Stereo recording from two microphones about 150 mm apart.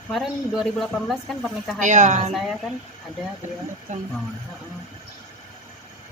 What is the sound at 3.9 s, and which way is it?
Speech, 55° right (ahead or behind).